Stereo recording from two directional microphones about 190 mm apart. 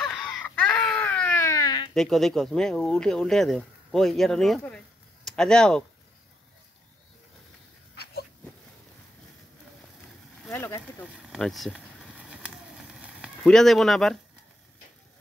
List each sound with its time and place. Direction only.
0.0 s baby cry: centre (ahead or behind); by 1.9 s 20° left (ahead or behind)
2.0 s speech: centre (ahead or behind)
7.9 s dog: 60° left (ahead or behind)
10.5 s speech: 10° left (ahead or behind)
11.2 s a sound: centre (ahead or behind)